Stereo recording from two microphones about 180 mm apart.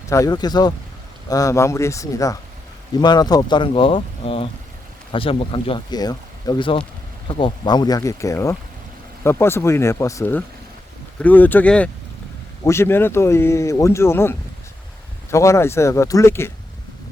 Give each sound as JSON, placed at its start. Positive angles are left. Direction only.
{"t": 0.1, "sound": "speech", "side_deg": 20}